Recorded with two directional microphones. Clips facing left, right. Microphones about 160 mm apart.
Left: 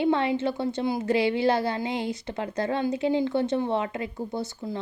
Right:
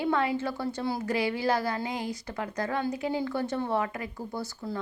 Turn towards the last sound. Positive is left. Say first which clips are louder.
# left 3 dB
turn(degrees=25)  # may be behind; listen again after turning